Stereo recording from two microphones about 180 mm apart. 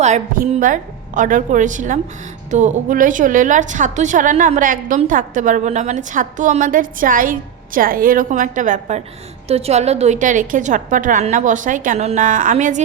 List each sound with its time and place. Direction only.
0.0 s a woman's voice: 40° right (ahead or behind)